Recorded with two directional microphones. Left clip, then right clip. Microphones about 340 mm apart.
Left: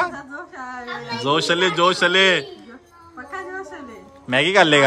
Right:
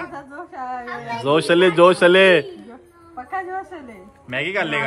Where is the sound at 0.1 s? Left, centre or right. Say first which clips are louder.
Even; centre.